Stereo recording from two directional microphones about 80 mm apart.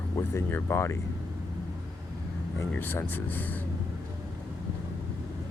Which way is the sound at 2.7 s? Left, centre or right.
Left.